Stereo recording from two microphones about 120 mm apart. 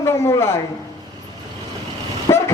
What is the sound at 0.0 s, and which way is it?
Speech, 20° left (ahead or behind).